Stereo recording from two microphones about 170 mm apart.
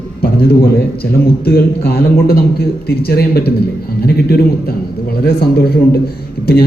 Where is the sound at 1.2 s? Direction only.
65° left (ahead or behind).